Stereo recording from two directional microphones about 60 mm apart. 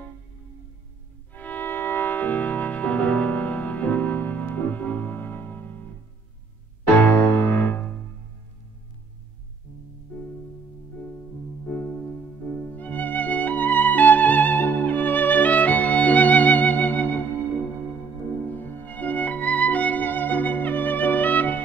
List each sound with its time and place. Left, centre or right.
1.3 s music: left
6.9 s music: left
11.7 s music: left
18.5 s music: left